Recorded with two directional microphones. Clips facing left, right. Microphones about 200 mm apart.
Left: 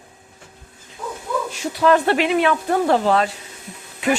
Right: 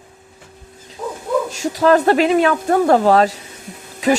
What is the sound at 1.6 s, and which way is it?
Speech, 40° right (ahead or behind).